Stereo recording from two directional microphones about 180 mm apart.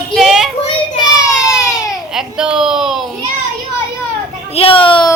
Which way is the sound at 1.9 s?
5° right (ahead or behind).